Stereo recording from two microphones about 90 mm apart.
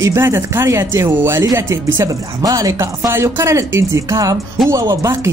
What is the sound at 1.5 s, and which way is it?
A woman's voice, 40° right (ahead or behind).